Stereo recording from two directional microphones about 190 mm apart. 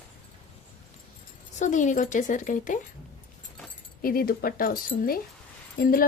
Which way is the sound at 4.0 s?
50° left (ahead or behind).